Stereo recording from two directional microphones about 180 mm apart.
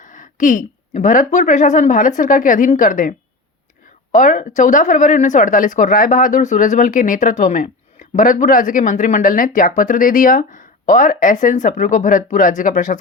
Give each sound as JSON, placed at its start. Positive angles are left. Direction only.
{"t": 0.0, "sound": "speech", "side_deg": 45}